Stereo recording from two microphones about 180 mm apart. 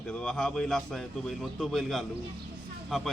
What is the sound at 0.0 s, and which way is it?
A man's voice, 5° left (ahead or behind).